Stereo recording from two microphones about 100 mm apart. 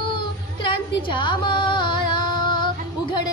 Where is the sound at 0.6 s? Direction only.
55° left (ahead or behind).